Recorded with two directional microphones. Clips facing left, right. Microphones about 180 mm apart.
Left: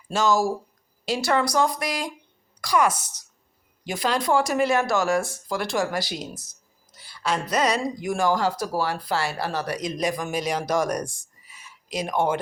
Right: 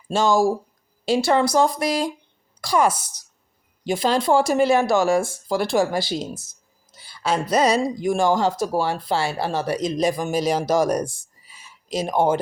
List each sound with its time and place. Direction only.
0.1 s speech: 30° right (ahead or behind)